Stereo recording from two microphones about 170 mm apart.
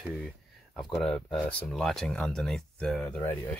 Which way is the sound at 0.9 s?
5° left (ahead or behind).